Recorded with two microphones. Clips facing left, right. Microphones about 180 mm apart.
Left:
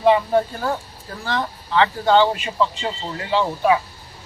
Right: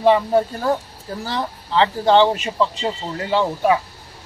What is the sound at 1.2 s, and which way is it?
Speech, 30° right (ahead or behind).